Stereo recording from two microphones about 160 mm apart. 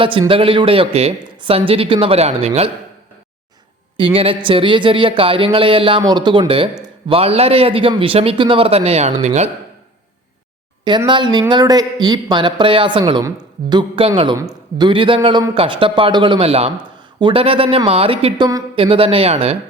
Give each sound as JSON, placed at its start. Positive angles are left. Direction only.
{"t": 0.0, "sound": "a man's voice", "side_deg": -35}
{"t": 3.9, "sound": "a woman's voice", "side_deg": -35}
{"t": 10.8, "sound": "a man's voice", "side_deg": -30}